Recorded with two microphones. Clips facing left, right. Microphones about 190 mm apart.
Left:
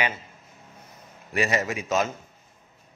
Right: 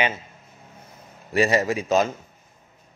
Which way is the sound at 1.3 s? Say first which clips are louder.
Right 5 dB; 35° right (ahead or behind).